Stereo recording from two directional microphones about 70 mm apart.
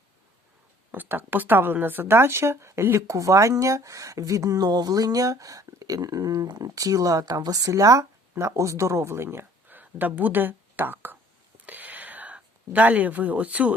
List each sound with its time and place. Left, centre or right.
0.9 s a woman's voice: right
9.6 s speech: right
11.6 s a sound: right